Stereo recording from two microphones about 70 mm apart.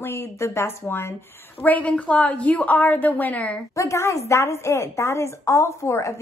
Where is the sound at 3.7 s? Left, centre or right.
Left.